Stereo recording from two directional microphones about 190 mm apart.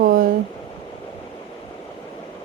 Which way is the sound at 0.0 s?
50° right (ahead or behind).